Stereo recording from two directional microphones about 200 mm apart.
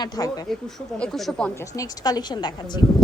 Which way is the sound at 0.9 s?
5° left (ahead or behind).